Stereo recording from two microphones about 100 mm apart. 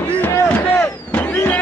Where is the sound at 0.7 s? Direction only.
15° left (ahead or behind).